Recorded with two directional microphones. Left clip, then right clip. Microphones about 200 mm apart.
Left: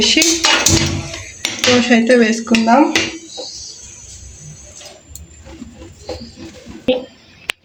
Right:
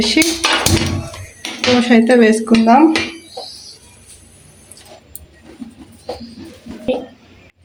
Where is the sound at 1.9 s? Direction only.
35° right (ahead or behind).